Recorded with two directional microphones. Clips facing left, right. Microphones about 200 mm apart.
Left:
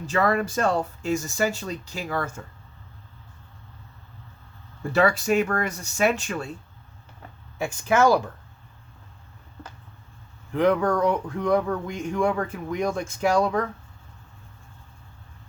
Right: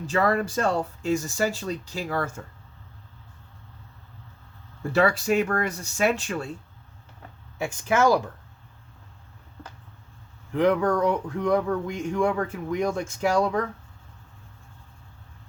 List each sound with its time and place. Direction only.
0.0 s speech: 30° right (ahead or behind)
4.9 s speech: 30° right (ahead or behind)
7.6 s speech: 20° right (ahead or behind)
10.6 s speech: 20° right (ahead or behind)